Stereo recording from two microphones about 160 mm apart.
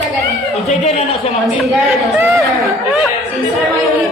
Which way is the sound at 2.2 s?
15° right (ahead or behind).